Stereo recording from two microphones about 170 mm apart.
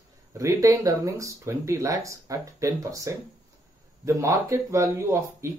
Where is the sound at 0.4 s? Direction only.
20° right (ahead or behind).